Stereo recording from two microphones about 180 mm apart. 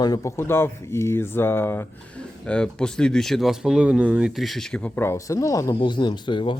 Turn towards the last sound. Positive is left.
turn(degrees=25)  # may be behind; listen again after turning